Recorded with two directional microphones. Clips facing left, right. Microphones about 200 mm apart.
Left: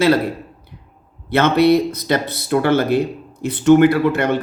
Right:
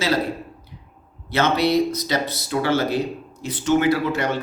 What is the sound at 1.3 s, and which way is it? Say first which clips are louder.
Speech: left 5 dB; 55° left (ahead or behind).